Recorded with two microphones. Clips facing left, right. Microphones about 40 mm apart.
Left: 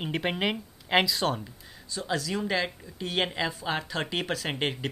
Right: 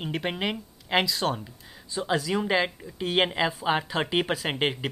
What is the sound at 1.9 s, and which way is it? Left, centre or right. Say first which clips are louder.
Speech: right 4 dB; right.